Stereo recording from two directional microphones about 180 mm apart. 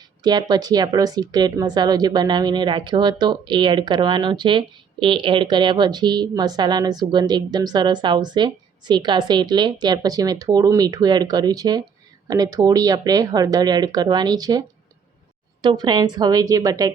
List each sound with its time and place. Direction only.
0.2 s speech: 25° right (ahead or behind)
15.6 s speech: 25° right (ahead or behind)